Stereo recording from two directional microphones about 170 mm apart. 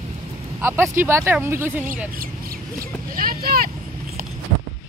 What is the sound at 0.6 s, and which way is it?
Speech, 15° right (ahead or behind).